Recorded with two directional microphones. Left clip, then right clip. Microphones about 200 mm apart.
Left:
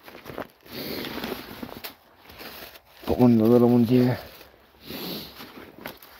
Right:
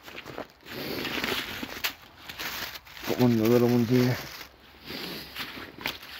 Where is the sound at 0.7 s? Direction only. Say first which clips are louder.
Right 1 dB; centre (ahead or behind).